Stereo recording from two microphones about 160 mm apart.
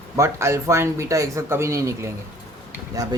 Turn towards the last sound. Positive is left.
turn(degrees=-20)  # may be behind; listen again after turning